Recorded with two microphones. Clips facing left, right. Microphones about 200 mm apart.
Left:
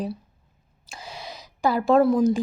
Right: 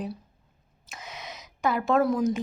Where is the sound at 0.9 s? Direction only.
30° left (ahead or behind).